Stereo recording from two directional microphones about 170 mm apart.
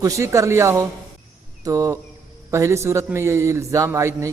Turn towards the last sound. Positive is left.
turn(degrees=-15)  # may be behind; listen again after turning